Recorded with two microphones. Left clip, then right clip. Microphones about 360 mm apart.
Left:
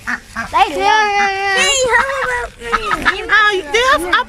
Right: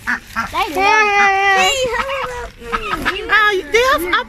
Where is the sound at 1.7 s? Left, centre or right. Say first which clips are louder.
Left 5 dB; left.